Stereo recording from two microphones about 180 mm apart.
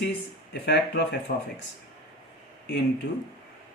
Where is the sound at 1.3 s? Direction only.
55° left (ahead or behind).